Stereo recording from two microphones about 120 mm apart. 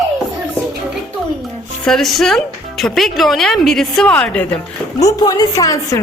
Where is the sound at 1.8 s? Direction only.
5° left (ahead or behind).